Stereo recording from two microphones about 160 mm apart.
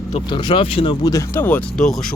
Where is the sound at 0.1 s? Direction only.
30° left (ahead or behind).